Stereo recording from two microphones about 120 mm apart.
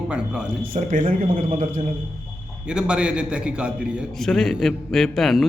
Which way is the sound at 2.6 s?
5° right (ahead or behind).